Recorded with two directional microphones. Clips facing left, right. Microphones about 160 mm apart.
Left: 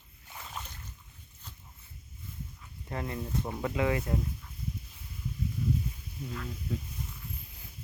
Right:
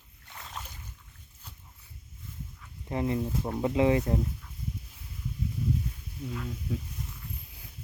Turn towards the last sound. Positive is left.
turn(degrees=-5)  # may be behind; listen again after turning